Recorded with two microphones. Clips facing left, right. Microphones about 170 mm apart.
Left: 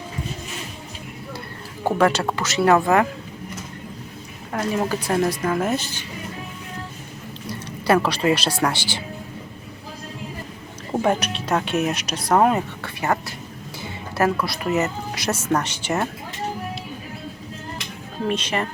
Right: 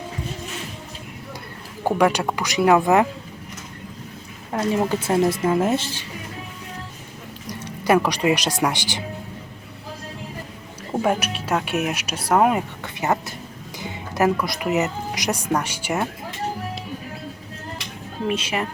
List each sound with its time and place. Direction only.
1.8 s speech: 10° right (ahead or behind)
4.5 s speech: 25° right (ahead or behind)
7.4 s speech: 15° right (ahead or behind)
10.9 s speech: 5° right (ahead or behind)
12.8 s speech: 20° right (ahead or behind)
18.3 s speech: 5° right (ahead or behind)